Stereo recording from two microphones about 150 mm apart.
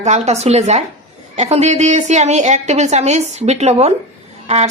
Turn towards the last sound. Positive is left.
turn(degrees=-45)  # may be behind; listen again after turning